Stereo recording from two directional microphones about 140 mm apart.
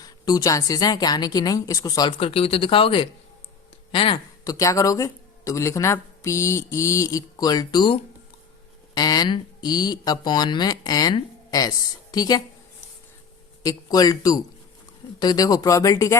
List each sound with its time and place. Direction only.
0.0 s a woman's voice: 25° left (ahead or behind)
2.1 s speech: 40° left (ahead or behind)
3.9 s a sound: 35° left (ahead or behind)
4.5 s a woman's voice: 25° left (ahead or behind)
9.0 s a woman's voice: 30° left (ahead or behind)
13.6 s a woman's voice: 25° left (ahead or behind)